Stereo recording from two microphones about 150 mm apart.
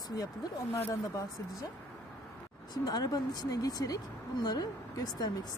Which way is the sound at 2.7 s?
25° left (ahead or behind).